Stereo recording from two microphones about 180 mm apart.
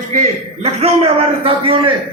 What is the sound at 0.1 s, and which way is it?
A man's voice, 35° right (ahead or behind).